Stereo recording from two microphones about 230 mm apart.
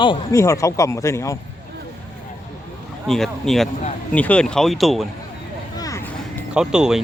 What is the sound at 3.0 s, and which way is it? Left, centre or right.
Speech, centre.